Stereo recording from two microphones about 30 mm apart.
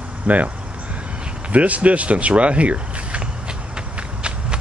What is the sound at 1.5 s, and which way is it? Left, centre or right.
Speech, right.